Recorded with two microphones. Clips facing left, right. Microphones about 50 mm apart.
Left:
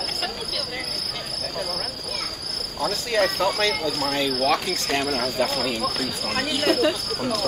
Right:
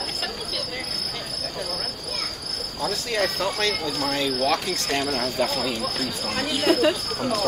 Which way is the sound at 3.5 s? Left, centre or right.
Centre.